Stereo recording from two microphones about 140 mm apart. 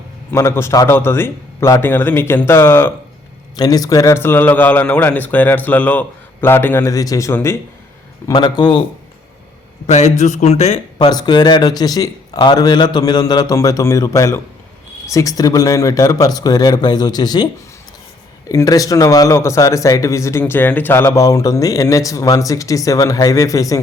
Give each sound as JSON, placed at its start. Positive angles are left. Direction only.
{"t": 0.3, "sound": "a man's voice", "side_deg": 20}
{"t": 3.5, "sound": "a man's voice", "side_deg": 30}
{"t": 8.3, "sound": "speech", "side_deg": 30}
{"t": 9.8, "sound": "speech", "side_deg": 55}
{"t": 10.9, "sound": "a man's voice", "side_deg": 30}